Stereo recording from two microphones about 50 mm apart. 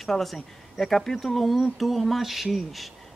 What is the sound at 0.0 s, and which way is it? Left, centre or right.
Speech, centre.